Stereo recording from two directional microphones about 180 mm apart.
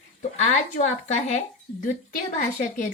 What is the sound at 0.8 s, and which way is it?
A woman's voice, 40° left (ahead or behind).